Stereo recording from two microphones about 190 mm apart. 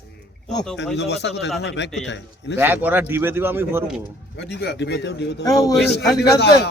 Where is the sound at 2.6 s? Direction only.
10° right (ahead or behind).